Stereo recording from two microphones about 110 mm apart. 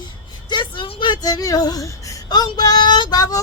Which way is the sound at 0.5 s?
50° left (ahead or behind).